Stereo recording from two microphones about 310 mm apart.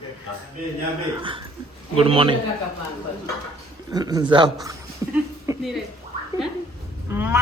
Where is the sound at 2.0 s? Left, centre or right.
Centre.